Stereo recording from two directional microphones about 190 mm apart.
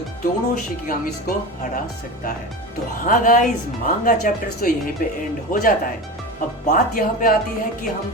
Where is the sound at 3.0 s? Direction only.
45° left (ahead or behind).